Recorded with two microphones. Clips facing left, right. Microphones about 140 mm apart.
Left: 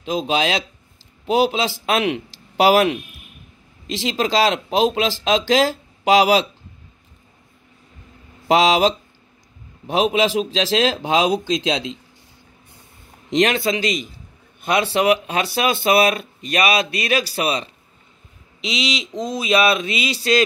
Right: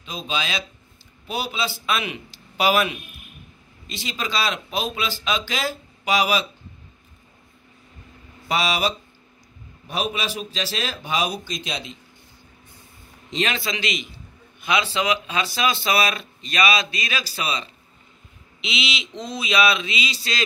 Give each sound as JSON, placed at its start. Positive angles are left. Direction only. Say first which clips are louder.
{"t": 0.0, "sound": "speech", "louder": "left 9 dB", "side_deg": 80}
{"t": 8.5, "sound": "speech", "louder": "left 8 dB", "side_deg": 90}
{"t": 13.3, "sound": "a man's voice", "louder": "left 8 dB", "side_deg": 70}
{"t": 13.6, "sound": "a man's voice", "louder": "left 7 dB", "side_deg": 40}
{"t": 14.6, "sound": "a man's voice", "louder": "left 5 dB", "side_deg": 50}
{"t": 18.6, "sound": "mantra", "louder": "left 5 dB", "side_deg": 40}